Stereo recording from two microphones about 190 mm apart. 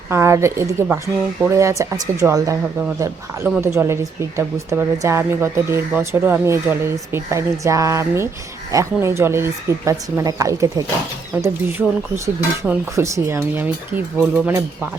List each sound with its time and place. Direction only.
0.1 s speech: 15° right (ahead or behind)